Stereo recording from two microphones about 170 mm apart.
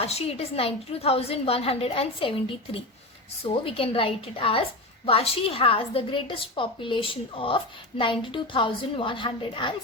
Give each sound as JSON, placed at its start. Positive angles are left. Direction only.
{"t": 0.0, "sound": "a woman's voice", "side_deg": 35}